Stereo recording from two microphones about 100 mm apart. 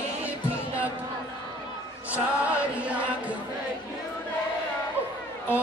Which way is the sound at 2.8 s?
10° right (ahead or behind).